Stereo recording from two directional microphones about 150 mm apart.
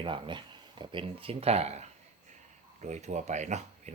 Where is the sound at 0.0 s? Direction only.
35° right (ahead or behind).